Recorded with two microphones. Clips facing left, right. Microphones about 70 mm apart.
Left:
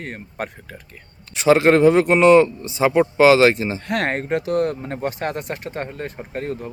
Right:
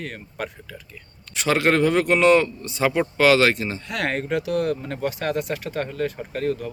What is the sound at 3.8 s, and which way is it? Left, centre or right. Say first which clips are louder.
Speech: left 3 dB; left.